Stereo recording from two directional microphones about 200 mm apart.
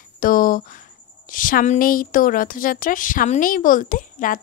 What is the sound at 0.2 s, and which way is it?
A woman's voice, 45° left (ahead or behind).